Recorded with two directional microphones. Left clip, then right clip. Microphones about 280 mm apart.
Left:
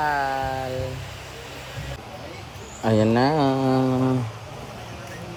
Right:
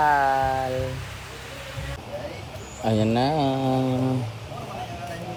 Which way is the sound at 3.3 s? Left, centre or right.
Left.